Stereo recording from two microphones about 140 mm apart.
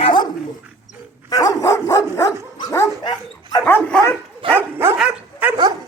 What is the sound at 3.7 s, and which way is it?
Dog, 10° left (ahead or behind).